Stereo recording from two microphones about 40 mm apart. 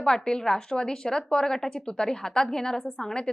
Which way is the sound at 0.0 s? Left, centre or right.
Centre.